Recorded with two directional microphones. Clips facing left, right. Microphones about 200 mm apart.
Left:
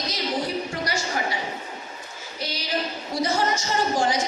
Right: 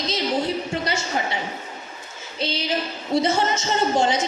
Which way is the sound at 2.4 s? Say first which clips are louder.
Right 4 dB; 25° right (ahead or behind).